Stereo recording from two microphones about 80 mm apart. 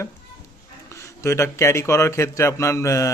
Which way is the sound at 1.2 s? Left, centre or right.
Left.